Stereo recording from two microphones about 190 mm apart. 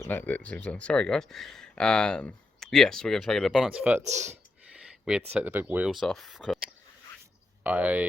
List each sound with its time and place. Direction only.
0.0 s speech: 10° left (ahead or behind)
4.0 s speech: 35° right (ahead or behind)
4.8 s a sound: 5° right (ahead or behind)
5.3 s speech: 10° right (ahead or behind)
7.6 s speech: 10° right (ahead or behind)